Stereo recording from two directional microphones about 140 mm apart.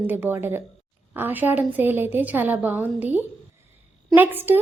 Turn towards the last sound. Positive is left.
turn(degrees=-15)  # may be behind; listen again after turning